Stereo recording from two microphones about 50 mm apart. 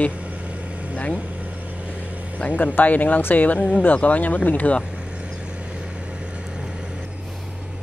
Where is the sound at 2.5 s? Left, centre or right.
Left.